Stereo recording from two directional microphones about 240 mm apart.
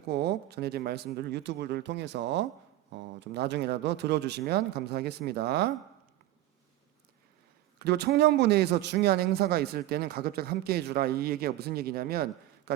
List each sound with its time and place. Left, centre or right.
0.1 s speech: right
7.8 s a man's voice: right